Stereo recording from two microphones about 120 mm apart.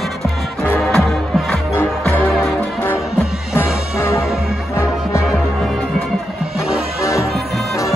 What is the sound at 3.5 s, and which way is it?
Music, 20° left (ahead or behind).